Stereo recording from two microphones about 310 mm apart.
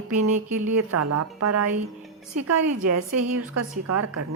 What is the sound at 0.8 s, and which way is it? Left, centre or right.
Speech, right.